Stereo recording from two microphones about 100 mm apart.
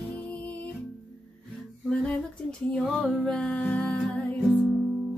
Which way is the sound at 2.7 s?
5° left (ahead or behind).